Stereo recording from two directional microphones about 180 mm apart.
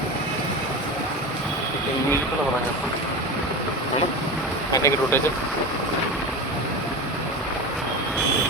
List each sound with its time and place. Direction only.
4.7 s speech: 15° left (ahead or behind)